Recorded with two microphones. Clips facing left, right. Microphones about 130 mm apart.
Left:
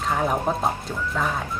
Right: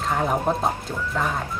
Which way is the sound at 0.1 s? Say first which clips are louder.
Right 1 dB; centre (ahead or behind).